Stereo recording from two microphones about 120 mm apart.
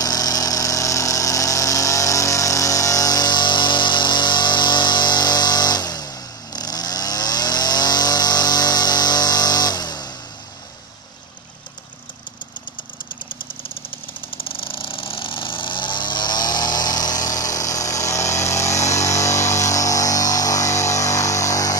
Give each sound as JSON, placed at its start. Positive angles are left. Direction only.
{"t": 0.0, "sound": "power tool", "side_deg": 30}
{"t": 14.4, "sound": "vehicle", "side_deg": 45}